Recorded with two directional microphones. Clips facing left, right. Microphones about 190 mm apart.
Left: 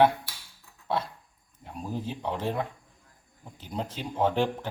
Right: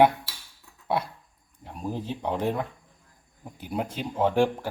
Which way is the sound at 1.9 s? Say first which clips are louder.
Right 3 dB; 15° right (ahead or behind).